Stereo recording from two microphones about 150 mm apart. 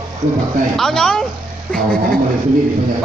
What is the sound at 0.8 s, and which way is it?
Speech, 5° left (ahead or behind).